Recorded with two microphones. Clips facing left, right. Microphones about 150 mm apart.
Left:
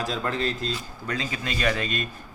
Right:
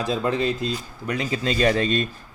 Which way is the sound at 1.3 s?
30° right (ahead or behind).